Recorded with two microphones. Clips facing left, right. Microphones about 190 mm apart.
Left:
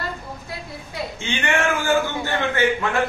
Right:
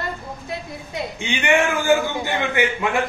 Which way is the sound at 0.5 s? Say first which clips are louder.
Right 3 dB; 20° right (ahead or behind).